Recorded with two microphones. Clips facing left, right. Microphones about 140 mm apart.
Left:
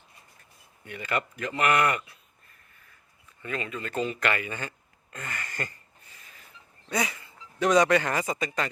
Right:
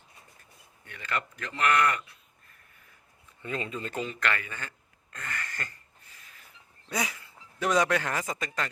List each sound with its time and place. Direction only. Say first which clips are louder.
0.9 s speech: left 4 dB; 10° left (ahead or behind)
3.4 s speech: even; 25° right (ahead or behind)
4.1 s speech: left 3 dB; 10° left (ahead or behind)
6.1 s a sound: left 2 dB; centre (ahead or behind)